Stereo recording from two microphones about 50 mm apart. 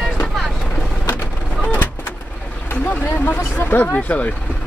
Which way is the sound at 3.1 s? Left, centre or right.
Left.